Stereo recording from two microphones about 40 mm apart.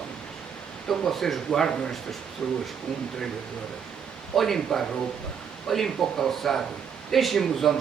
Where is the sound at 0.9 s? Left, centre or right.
Centre.